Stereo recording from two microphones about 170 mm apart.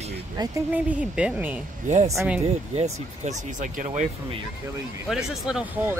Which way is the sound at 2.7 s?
40° right (ahead or behind).